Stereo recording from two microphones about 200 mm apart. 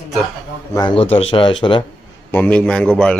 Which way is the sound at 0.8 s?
25° left (ahead or behind).